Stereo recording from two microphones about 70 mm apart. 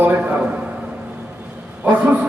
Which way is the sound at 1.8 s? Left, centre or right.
Right.